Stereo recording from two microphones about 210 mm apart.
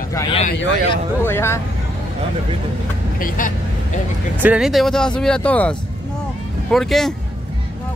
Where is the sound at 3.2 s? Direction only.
40° left (ahead or behind).